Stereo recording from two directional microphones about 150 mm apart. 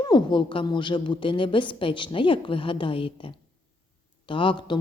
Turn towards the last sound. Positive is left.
turn(degrees=35)  # may be behind; listen again after turning